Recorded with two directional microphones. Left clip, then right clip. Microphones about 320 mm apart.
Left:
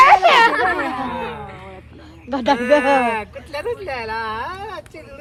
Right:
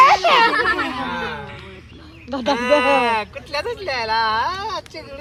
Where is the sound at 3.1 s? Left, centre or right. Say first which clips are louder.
Right 3 dB; centre.